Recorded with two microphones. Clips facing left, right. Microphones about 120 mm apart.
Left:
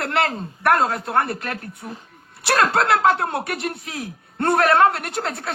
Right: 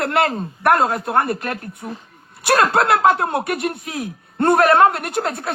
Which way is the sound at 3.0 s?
15° right (ahead or behind).